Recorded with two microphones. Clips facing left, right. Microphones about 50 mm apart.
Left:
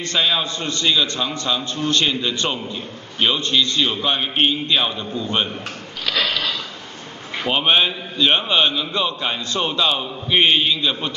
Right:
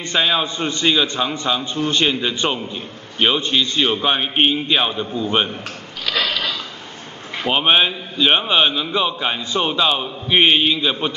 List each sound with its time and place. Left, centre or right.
0.0 s a man's voice: centre
6.1 s sniff: centre
7.4 s a man's voice: centre